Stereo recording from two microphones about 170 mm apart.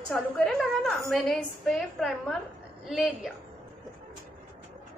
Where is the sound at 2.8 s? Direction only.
Centre (ahead or behind).